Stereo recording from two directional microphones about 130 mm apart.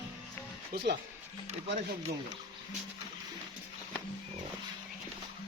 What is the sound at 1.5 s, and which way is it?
Speech, 55° right (ahead or behind).